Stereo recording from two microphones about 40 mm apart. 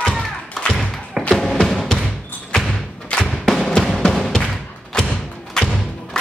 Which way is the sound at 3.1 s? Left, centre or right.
Centre.